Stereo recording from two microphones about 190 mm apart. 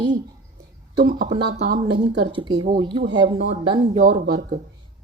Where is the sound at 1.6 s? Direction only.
60° right (ahead or behind).